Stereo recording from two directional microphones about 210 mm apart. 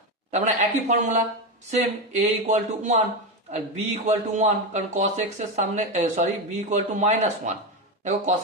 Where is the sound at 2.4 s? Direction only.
35° right (ahead or behind).